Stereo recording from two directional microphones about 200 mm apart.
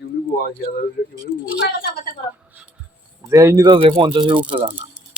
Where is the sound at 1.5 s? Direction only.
55° left (ahead or behind).